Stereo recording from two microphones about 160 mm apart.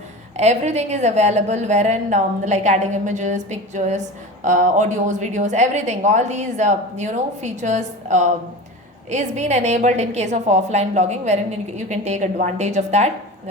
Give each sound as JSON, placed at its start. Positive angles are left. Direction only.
{"t": 0.3, "sound": "a woman's voice", "side_deg": -45}